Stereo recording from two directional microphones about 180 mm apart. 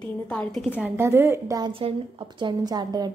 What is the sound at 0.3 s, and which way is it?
Speech, 5° left (ahead or behind).